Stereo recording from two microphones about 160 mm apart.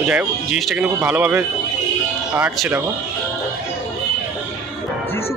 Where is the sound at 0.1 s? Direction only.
5° right (ahead or behind).